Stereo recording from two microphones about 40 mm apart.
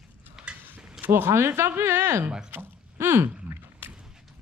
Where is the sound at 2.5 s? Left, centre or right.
Right.